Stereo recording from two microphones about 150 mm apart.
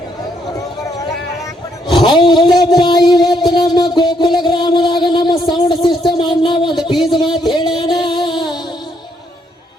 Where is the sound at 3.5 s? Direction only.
30° left (ahead or behind).